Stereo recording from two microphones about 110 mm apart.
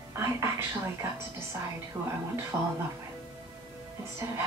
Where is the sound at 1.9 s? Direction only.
35° right (ahead or behind).